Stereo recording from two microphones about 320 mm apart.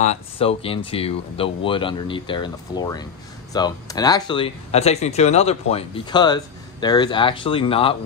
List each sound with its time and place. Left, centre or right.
0.0 s speech: centre